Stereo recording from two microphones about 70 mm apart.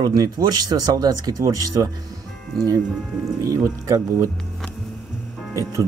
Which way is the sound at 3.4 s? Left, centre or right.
Right.